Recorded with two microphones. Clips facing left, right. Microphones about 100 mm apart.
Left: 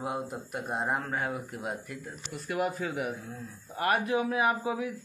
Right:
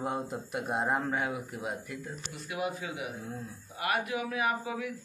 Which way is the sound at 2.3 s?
50° left (ahead or behind).